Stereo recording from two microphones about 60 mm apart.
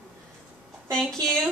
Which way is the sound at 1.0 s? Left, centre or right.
Centre.